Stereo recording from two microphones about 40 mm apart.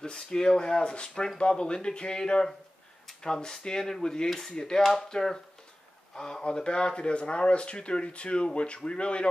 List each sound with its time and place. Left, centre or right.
0.0 s speech: centre